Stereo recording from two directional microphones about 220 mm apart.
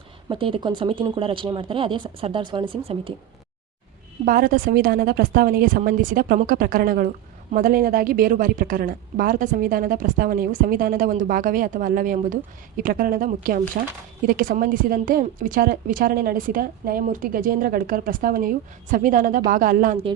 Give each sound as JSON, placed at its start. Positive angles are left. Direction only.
{"t": 0.3, "sound": "speech", "side_deg": -25}
{"t": 4.3, "sound": "a woman's voice", "side_deg": -40}